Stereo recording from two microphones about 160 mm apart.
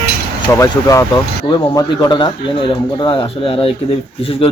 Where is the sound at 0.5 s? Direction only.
20° left (ahead or behind).